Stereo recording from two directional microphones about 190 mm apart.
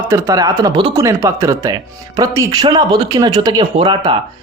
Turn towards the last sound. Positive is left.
turn(degrees=-25)  # may be behind; listen again after turning